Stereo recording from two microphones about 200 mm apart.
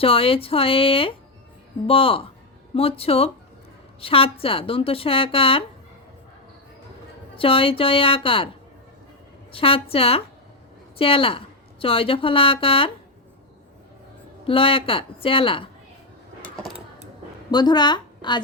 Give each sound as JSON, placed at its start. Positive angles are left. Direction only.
{"t": 0.0, "sound": "speech", "side_deg": 30}
{"t": 7.3, "sound": "speech", "side_deg": 25}
{"t": 9.5, "sound": "a woman's voice", "side_deg": 25}
{"t": 14.4, "sound": "speech", "side_deg": 25}
{"t": 16.4, "sound": "a sound", "side_deg": 0}
{"t": 17.5, "sound": "a woman's voice", "side_deg": 20}